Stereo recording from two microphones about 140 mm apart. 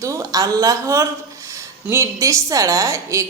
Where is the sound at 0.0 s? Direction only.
25° right (ahead or behind).